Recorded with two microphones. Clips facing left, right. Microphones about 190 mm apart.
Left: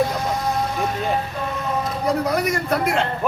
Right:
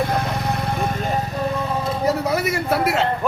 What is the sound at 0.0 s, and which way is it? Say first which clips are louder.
Vehicle: left 1 dB; 60° right (ahead or behind).